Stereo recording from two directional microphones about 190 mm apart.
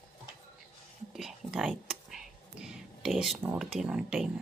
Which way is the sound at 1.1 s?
Centre (ahead or behind).